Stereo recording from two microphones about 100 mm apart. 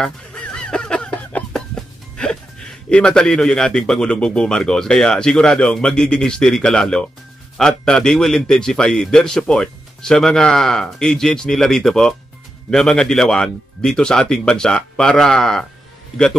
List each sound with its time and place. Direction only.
0.0 s a sound: 10° left (ahead or behind)
1.8 s music: 5° left (ahead or behind)
2.9 s a man's voice: 10° left (ahead or behind)